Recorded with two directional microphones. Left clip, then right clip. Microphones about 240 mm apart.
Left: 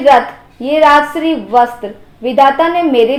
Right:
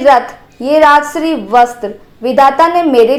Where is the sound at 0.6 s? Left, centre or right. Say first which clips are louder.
Right 1 dB; right.